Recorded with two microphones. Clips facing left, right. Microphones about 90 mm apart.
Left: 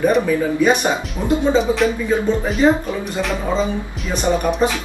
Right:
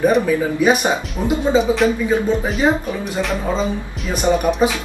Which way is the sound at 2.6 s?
15° right (ahead or behind).